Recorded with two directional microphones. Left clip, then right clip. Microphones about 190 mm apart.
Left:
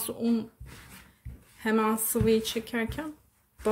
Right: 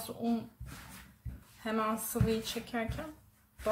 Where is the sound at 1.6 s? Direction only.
45° left (ahead or behind).